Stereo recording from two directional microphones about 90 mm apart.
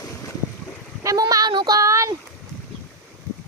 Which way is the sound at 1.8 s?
35° right (ahead or behind).